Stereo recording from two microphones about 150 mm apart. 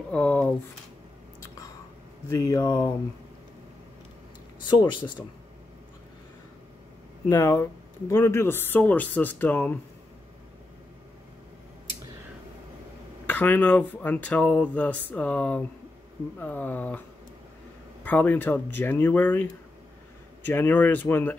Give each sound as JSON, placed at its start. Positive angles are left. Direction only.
{"t": 0.1, "sound": "a sound", "side_deg": 10}
{"t": 2.2, "sound": "speech", "side_deg": 20}
{"t": 4.6, "sound": "speech", "side_deg": 30}
{"t": 7.2, "sound": "speech", "side_deg": 20}
{"t": 13.3, "sound": "speech", "side_deg": 10}
{"t": 18.0, "sound": "speech", "side_deg": 10}